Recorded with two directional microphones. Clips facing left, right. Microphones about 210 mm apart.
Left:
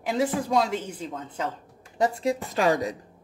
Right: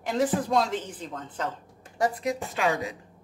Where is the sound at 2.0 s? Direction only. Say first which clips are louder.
Left 2 dB; 25° left (ahead or behind).